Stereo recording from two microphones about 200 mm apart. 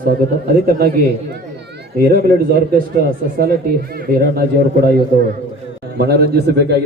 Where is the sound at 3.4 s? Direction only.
50° right (ahead or behind).